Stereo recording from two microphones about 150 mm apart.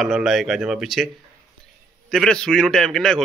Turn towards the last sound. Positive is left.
turn(degrees=5)  # may be behind; listen again after turning